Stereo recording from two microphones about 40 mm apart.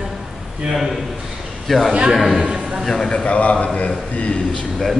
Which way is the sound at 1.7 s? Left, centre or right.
Centre.